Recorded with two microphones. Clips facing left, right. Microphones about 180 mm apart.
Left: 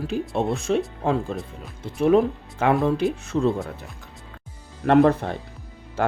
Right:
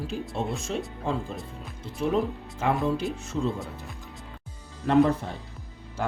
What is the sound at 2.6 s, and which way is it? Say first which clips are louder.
Speech: left 6 dB; 70° left (ahead or behind).